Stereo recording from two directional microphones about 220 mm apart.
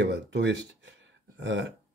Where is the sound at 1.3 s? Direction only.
55° right (ahead or behind).